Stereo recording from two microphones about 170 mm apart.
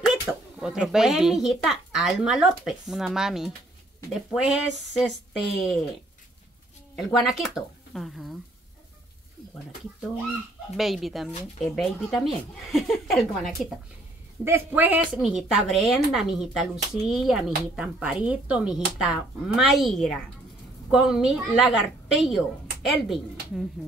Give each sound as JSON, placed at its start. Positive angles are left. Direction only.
{"t": 0.0, "sound": "a child's voice", "side_deg": -5}
{"t": 5.6, "sound": "a child's voice", "side_deg": 0}
{"t": 7.0, "sound": "a child's voice", "side_deg": 0}
{"t": 10.8, "sound": "a child's voice", "side_deg": 0}
{"t": 14.4, "sound": "a child's voice", "side_deg": -10}